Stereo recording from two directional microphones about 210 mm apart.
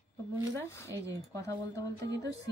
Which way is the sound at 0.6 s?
15° left (ahead or behind).